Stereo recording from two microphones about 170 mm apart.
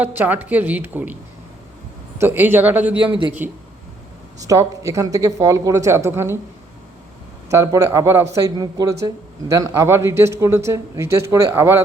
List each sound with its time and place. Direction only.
0.0 s speech: 10° right (ahead or behind)
7.5 s speech: 20° right (ahead or behind)